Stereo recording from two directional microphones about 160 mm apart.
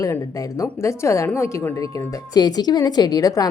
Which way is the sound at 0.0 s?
20° left (ahead or behind).